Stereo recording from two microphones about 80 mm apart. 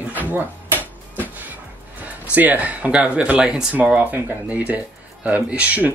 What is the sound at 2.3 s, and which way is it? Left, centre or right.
Speech, centre.